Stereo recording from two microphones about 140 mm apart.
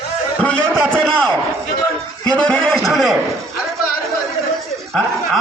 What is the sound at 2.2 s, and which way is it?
Music, 5° left (ahead or behind).